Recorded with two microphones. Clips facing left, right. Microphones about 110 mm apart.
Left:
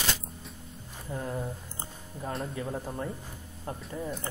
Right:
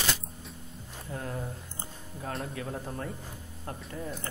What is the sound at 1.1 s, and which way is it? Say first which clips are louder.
Speech: left 3 dB; 10° left (ahead or behind).